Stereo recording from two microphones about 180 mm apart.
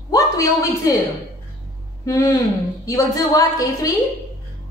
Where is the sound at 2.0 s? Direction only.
15° left (ahead or behind).